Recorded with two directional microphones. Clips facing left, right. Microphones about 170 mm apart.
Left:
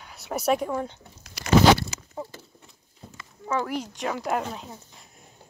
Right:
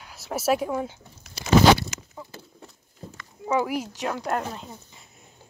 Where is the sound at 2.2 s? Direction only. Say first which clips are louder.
Left 10 dB; 25° left (ahead or behind).